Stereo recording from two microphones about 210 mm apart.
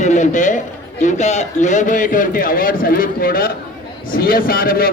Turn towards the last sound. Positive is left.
turn(degrees=45)  # may be behind; listen again after turning